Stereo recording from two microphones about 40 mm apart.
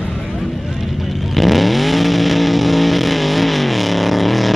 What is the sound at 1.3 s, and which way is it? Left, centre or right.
Vehicle, centre.